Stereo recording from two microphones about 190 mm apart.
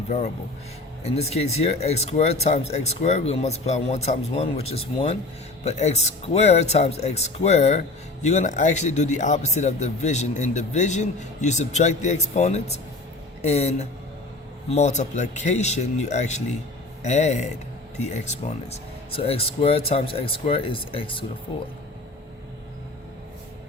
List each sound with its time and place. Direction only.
1.0 s speech: 35° left (ahead or behind)